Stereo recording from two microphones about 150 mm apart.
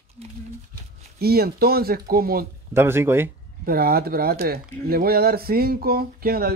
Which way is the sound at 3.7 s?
90° right.